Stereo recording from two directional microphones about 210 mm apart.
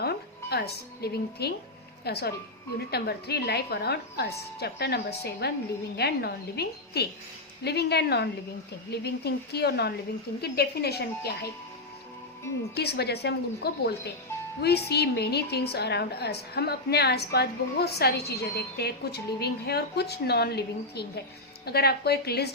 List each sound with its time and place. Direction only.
0.0 s a woman's voice: 50° left (ahead or behind)
12.7 s a woman's voice: 50° left (ahead or behind)